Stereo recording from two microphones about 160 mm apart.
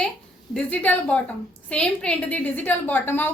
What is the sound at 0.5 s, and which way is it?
A woman's voice, 10° left (ahead or behind).